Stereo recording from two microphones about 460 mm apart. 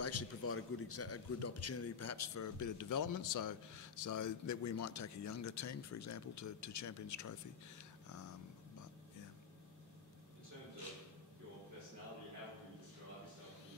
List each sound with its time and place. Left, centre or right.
0.0 s a man's voice: left